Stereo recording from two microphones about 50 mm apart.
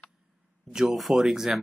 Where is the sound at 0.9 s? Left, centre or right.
Centre.